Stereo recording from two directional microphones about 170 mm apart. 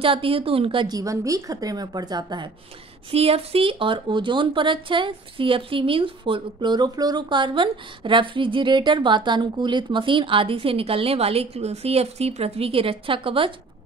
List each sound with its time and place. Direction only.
0.0 s a woman's voice: 35° right (ahead or behind)